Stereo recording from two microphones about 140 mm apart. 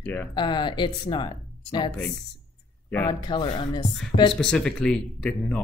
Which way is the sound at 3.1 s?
30° left (ahead or behind).